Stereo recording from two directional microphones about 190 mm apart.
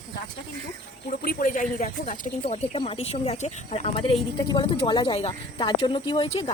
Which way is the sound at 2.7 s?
30° left (ahead or behind).